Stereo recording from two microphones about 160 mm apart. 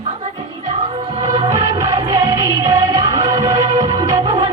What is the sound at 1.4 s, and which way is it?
Music, 20° right (ahead or behind).